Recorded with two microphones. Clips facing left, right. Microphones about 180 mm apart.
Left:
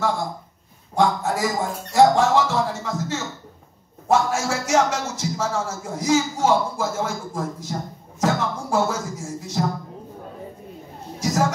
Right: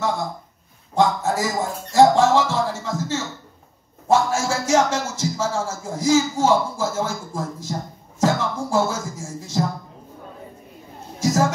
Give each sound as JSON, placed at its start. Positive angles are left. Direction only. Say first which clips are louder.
{"t": 0.9, "sound": "a man's voice", "louder": "right 1 dB", "side_deg": -25}
{"t": 4.1, "sound": "music", "louder": "right 1 dB", "side_deg": -25}
{"t": 11.1, "sound": "a sound", "louder": "right 3 dB", "side_deg": -25}